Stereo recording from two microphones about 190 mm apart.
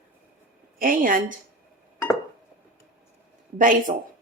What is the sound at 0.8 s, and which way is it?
Speech, 45° right (ahead or behind).